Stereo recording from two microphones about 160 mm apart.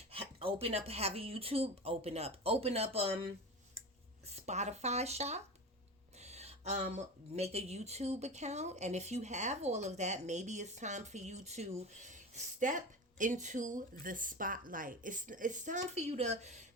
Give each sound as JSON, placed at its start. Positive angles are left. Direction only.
{"t": 0.1, "sound": "speech", "side_deg": -35}
{"t": 4.4, "sound": "speech", "side_deg": -45}